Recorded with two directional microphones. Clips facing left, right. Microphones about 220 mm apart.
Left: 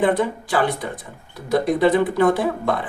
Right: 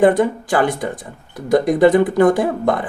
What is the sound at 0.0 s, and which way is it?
Speech, 45° right (ahead or behind).